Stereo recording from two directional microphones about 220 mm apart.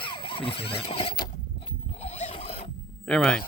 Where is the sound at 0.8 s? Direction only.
25° left (ahead or behind).